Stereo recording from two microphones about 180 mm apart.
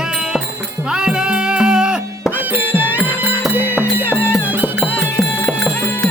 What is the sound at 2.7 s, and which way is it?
Music, 10° left (ahead or behind).